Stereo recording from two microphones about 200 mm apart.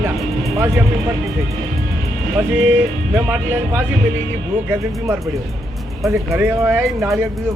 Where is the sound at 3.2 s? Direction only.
10° right (ahead or behind).